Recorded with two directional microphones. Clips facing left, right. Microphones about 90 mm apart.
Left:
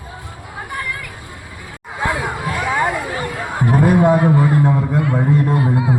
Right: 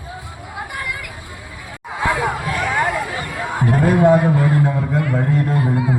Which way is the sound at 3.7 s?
20° left (ahead or behind).